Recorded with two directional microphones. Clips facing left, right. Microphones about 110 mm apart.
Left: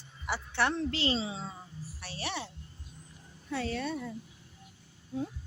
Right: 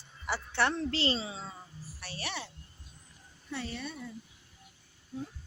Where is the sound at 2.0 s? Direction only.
25° left (ahead or behind).